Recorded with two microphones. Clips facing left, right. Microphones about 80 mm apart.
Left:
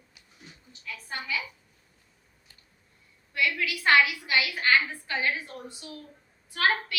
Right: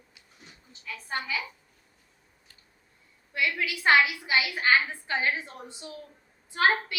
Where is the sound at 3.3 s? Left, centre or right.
Right.